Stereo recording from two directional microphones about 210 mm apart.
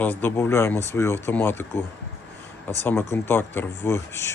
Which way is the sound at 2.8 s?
10° left (ahead or behind).